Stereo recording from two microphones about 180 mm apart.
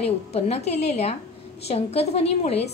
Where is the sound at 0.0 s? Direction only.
35° left (ahead or behind).